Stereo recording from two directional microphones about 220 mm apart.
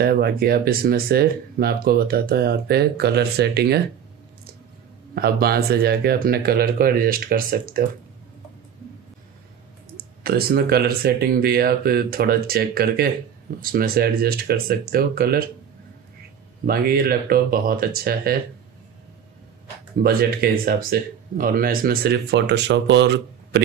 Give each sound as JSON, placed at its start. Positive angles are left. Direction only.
{"t": 0.0, "sound": "speech", "side_deg": -45}
{"t": 5.1, "sound": "speech", "side_deg": -45}
{"t": 9.9, "sound": "speech", "side_deg": -45}
{"t": 16.6, "sound": "speech", "side_deg": -40}
{"t": 20.0, "sound": "speech", "side_deg": -45}